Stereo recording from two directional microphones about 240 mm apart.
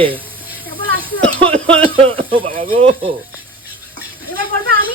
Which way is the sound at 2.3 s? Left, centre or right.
Right.